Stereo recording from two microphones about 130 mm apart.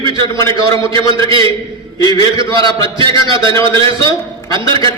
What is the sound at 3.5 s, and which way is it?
Speech, 40° right (ahead or behind).